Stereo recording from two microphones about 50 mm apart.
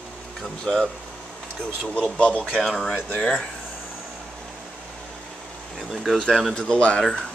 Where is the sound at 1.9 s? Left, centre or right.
Left.